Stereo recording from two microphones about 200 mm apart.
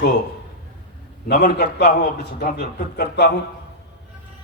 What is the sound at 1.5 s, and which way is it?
Speech, 50° left (ahead or behind).